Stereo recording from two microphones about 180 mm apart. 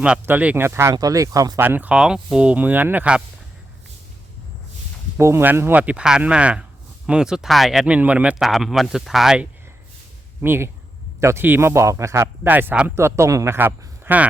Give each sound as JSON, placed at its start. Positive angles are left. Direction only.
{"t": 0.0, "sound": "speech", "side_deg": -10}
{"t": 5.1, "sound": "speech", "side_deg": -15}